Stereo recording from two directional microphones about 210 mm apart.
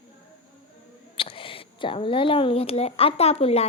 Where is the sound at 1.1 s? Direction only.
25° left (ahead or behind).